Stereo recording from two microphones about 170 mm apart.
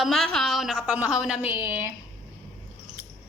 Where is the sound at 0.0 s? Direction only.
Centre (ahead or behind).